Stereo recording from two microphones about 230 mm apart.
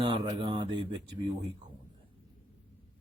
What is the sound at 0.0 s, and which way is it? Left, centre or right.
Speech, right.